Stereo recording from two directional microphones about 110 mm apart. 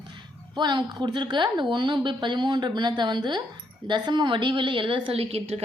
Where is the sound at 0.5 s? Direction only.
40° right (ahead or behind).